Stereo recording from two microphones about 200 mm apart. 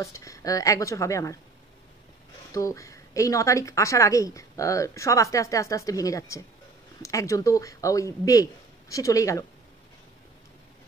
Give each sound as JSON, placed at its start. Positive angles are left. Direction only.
{"t": 0.0, "sound": "a woman's voice", "side_deg": 15}
{"t": 2.5, "sound": "a woman's voice", "side_deg": 15}